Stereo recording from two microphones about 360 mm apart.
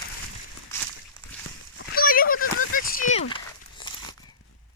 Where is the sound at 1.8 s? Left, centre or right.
Left.